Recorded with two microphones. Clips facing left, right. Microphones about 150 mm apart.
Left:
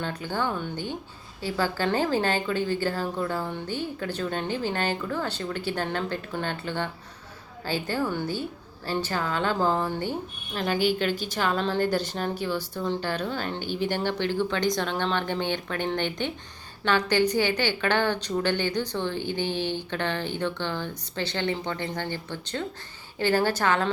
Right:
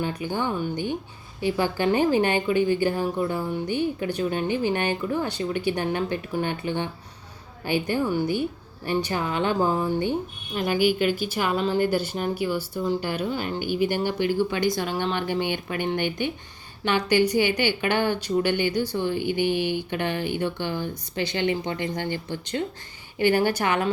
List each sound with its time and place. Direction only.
0.0 s a woman's voice: 15° right (ahead or behind)